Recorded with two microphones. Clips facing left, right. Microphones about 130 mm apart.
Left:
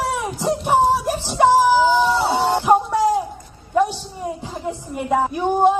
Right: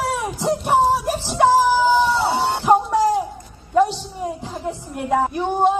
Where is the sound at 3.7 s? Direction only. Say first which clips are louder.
Right 2 dB; centre (ahead or behind).